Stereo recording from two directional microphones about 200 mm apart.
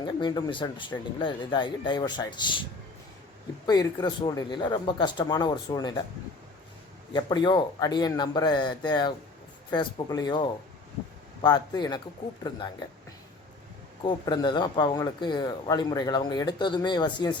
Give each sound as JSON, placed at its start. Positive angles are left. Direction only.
{"t": 0.0, "sound": "speech", "side_deg": 20}
{"t": 3.7, "sound": "speech", "side_deg": 20}
{"t": 7.1, "sound": "speech", "side_deg": 20}
{"t": 14.0, "sound": "speech", "side_deg": 25}